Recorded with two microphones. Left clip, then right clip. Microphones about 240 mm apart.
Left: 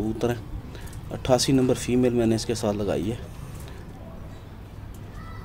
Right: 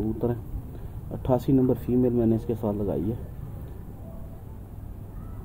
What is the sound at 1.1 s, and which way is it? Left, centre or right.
Speech, centre.